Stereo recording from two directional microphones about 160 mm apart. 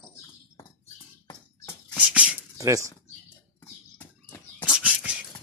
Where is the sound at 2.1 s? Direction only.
10° right (ahead or behind).